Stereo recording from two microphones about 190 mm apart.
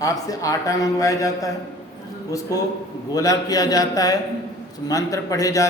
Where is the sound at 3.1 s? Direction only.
15° left (ahead or behind).